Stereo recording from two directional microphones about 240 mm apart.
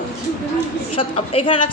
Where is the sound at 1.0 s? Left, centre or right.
Left.